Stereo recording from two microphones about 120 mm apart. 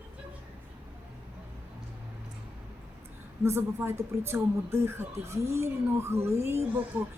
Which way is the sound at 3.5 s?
25° right (ahead or behind).